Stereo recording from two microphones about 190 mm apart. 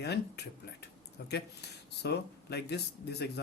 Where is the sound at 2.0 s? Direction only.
60° left (ahead or behind).